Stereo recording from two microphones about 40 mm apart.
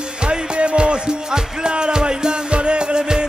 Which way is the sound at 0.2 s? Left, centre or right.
Right.